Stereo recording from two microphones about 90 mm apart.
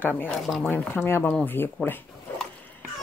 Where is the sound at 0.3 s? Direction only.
Centre (ahead or behind).